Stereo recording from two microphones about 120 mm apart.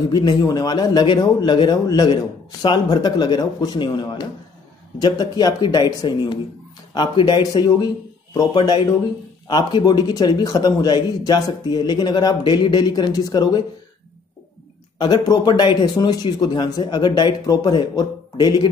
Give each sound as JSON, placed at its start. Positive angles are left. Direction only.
{"t": 0.1, "sound": "a man's voice", "side_deg": 35}
{"t": 15.0, "sound": "a man's voice", "side_deg": 35}